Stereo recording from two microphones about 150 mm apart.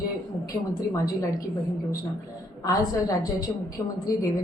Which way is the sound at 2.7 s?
25° left (ahead or behind).